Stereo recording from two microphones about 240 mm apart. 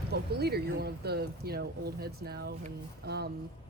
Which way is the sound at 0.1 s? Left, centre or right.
Right.